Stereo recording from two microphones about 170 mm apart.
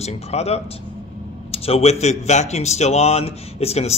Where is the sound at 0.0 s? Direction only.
40° left (ahead or behind).